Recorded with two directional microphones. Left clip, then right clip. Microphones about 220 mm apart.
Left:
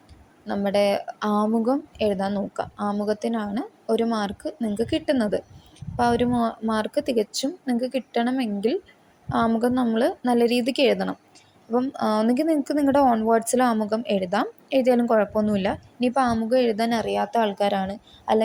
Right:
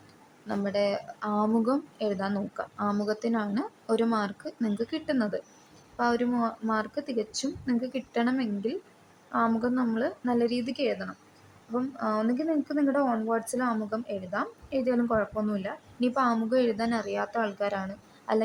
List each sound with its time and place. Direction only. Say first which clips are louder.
0.4 s a woman's voice: left 6 dB; 15° left (ahead or behind)